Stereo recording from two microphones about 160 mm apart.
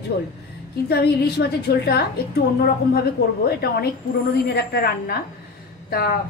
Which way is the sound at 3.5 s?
75° left (ahead or behind).